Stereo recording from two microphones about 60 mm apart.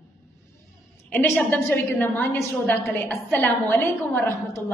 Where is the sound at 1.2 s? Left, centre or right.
Left.